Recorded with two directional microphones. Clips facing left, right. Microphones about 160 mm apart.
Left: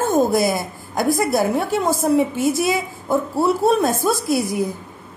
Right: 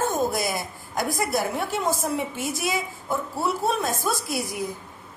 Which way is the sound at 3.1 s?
35° left (ahead or behind).